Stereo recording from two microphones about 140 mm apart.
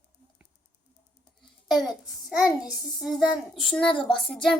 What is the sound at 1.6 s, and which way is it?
A child's voice, centre (ahead or behind).